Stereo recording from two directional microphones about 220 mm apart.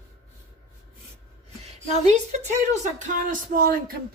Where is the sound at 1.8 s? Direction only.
30° right (ahead or behind).